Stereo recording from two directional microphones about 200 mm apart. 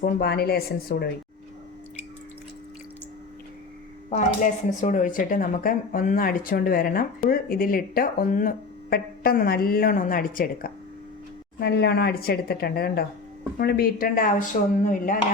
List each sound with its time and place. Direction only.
0.0 s speech: 50° left (ahead or behind)
4.1 s speech: 40° left (ahead or behind)